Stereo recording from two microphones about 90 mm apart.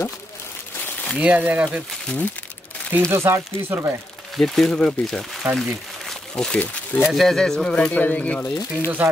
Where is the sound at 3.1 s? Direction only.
30° right (ahead or behind).